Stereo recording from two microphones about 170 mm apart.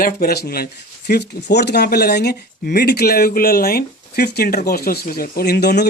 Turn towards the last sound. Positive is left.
turn(degrees=75)  # may be behind; listen again after turning